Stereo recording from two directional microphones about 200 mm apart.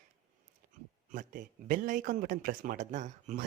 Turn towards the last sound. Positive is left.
turn(degrees=-40)  # may be behind; listen again after turning